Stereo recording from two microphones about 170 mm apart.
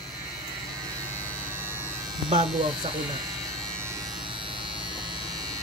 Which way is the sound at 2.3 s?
30° right (ahead or behind).